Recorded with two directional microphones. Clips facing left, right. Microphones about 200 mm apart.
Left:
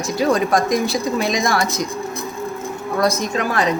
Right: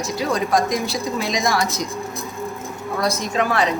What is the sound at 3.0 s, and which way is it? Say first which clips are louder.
Speech: left 2 dB; 45° left (ahead or behind).